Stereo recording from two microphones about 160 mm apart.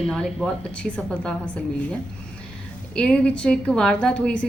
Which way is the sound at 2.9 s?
5° left (ahead or behind).